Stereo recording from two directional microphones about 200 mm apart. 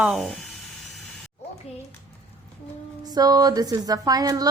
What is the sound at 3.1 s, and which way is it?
Speech, 20° right (ahead or behind).